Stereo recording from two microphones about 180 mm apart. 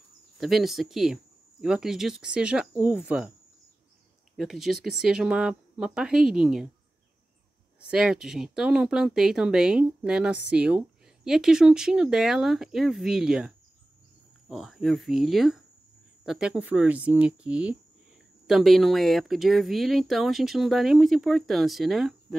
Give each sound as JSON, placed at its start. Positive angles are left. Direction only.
{"t": 0.4, "sound": "speech", "side_deg": 0}
{"t": 4.4, "sound": "speech", "side_deg": 0}
{"t": 7.8, "sound": "speech", "side_deg": -5}
{"t": 14.5, "sound": "speech", "side_deg": 0}